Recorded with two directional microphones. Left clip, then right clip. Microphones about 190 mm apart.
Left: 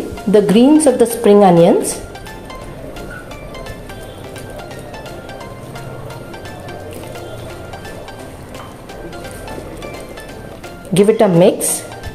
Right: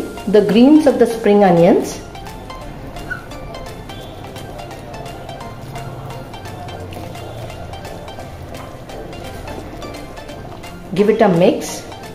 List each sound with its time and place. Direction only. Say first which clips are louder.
0.3 s speech: even; 25° left (ahead or behind)
10.9 s speech: left 2 dB; 35° left (ahead or behind)